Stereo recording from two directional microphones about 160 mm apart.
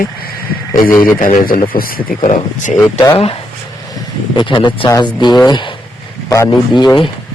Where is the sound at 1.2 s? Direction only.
55° left (ahead or behind).